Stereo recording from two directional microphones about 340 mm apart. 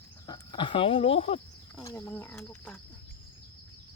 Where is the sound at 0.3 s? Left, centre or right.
Centre.